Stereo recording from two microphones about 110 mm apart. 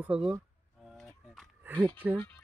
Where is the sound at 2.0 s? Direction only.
15° right (ahead or behind).